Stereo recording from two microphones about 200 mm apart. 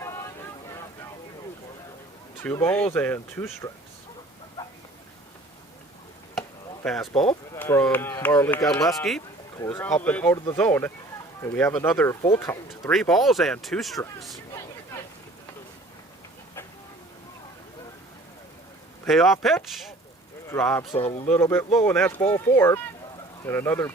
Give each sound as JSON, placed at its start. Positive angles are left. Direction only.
{"t": 0.0, "sound": "boat", "side_deg": 15}
{"t": 2.4, "sound": "speech", "side_deg": 10}
{"t": 6.8, "sound": "speech", "side_deg": 0}
{"t": 12.9, "sound": "speech", "side_deg": 0}
{"t": 19.0, "sound": "speech", "side_deg": 0}
{"t": 20.5, "sound": "speech", "side_deg": 10}
{"t": 20.9, "sound": "speech", "side_deg": 30}
{"t": 21.2, "sound": "speech", "side_deg": 10}